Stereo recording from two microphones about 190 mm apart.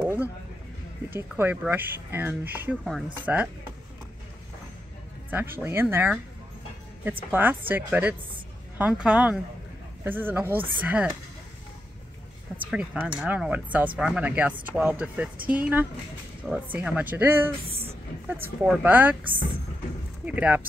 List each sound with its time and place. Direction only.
0.0 s music: 10° right (ahead or behind)
1.1 s speech: 10° right (ahead or behind)
2.8 s speech: centre (ahead or behind)
5.3 s speech: 10° right (ahead or behind)
12.7 s speech: 5° right (ahead or behind)
17.6 s a sound: 30° right (ahead or behind)
18.3 s speech: 10° right (ahead or behind)
20.2 s speech: 5° right (ahead or behind)